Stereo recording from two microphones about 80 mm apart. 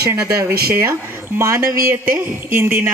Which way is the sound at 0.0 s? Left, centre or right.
Right.